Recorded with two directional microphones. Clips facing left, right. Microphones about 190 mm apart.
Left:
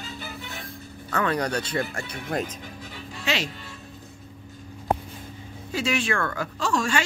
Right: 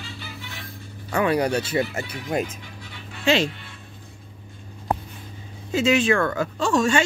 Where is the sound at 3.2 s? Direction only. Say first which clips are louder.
Right 8 dB; 30° right (ahead or behind).